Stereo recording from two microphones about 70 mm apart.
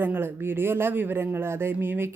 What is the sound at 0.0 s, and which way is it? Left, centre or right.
Speech, right.